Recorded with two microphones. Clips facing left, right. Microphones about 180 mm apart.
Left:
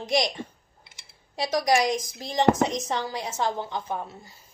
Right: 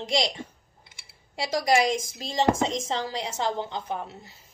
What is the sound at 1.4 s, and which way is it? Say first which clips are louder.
Speech: left 1 dB; 20° left (ahead or behind).